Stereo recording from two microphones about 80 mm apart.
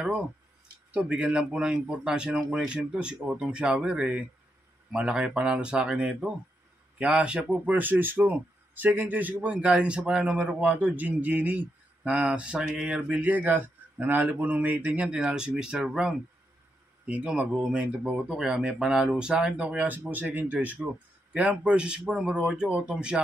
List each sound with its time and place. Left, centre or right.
0.9 s a man's voice: centre
7.7 s a man's voice: right; by 15.9 s centre
17.1 s a man's voice: centre